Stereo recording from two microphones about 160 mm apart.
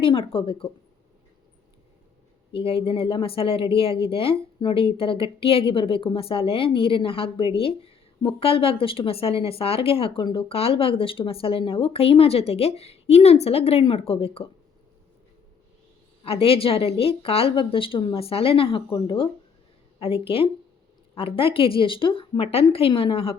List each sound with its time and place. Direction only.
0.0 s speech: 35° left (ahead or behind)
2.5 s speech: 35° left (ahead or behind)
16.2 s speech: 35° left (ahead or behind)